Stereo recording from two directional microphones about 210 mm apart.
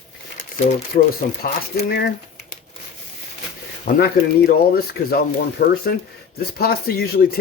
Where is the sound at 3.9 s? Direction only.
50° left (ahead or behind).